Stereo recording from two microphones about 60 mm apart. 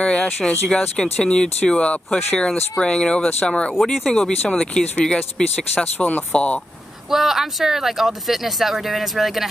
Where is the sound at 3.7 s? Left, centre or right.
Centre.